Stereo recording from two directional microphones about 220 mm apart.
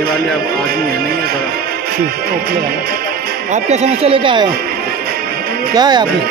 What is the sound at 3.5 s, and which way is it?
Speech, 30° right (ahead or behind).